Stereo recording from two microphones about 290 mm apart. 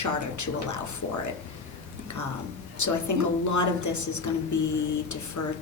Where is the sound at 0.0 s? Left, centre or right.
Left.